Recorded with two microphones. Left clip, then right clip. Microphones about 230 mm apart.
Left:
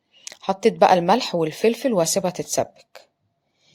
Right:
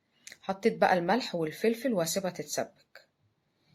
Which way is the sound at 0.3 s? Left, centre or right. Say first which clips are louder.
Left 9 dB; left.